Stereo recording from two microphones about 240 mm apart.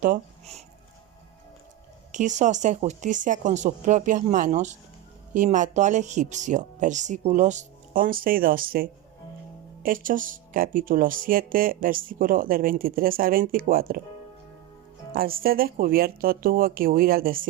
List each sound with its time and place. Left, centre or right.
0.0 s speech: right
2.1 s speech: right
15.1 s speech: right